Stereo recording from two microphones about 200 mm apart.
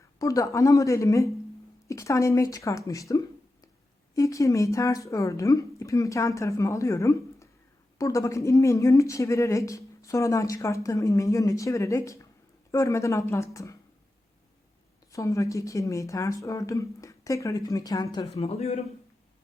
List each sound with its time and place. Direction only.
0.2 s speech: 15° left (ahead or behind)
15.1 s speech: 15° left (ahead or behind)
18.3 s a man's voice: 30° left (ahead or behind)